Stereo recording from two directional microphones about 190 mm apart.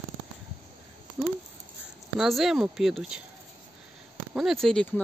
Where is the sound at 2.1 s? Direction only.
Centre (ahead or behind).